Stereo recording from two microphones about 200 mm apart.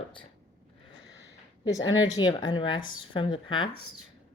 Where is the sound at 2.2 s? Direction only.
25° left (ahead or behind).